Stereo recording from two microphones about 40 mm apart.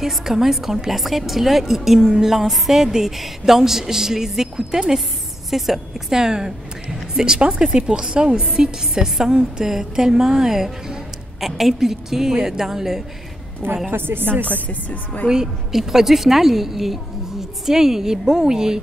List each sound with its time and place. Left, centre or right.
0.0 s a woman's voice: centre
2.5 s speech: centre
2.8 s a woman's voice: centre
13.8 s a woman's voice: right
14.4 s speech: left
15.2 s a woman's voice: centre